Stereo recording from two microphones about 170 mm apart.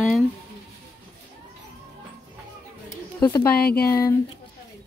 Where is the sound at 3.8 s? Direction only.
20° left (ahead or behind).